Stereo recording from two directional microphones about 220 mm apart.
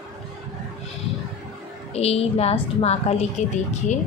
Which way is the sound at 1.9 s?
30° left (ahead or behind).